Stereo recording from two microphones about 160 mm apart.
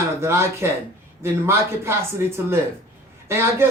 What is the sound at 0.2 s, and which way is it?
Speech, 15° right (ahead or behind).